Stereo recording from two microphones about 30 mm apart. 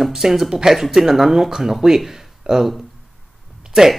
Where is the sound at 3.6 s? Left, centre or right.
Centre.